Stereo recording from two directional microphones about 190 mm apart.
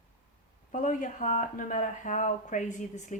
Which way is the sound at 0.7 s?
40° left (ahead or behind).